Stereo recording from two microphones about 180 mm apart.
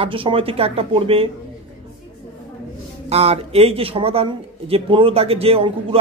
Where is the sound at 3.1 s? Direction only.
35° right (ahead or behind).